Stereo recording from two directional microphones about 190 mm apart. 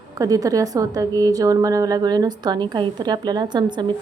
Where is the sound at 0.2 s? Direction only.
20° right (ahead or behind).